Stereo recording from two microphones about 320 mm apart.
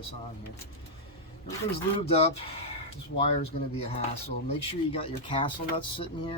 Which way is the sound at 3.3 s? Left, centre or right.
Centre.